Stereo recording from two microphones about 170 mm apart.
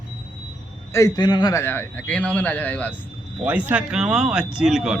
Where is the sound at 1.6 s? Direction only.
10° left (ahead or behind).